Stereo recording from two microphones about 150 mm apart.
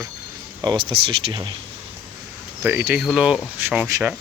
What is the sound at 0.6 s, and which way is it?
Speech, 30° right (ahead or behind).